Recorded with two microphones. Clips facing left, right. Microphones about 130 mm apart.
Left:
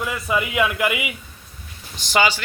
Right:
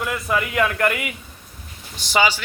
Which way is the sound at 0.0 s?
5° left (ahead or behind).